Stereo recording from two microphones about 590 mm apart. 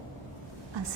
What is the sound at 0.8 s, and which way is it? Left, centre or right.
Speech, right.